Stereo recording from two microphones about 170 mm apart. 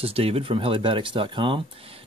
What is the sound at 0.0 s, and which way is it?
Speech, 35° right (ahead or behind).